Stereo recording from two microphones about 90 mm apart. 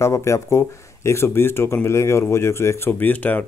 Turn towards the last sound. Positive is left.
turn(degrees=20)  # may be behind; listen again after turning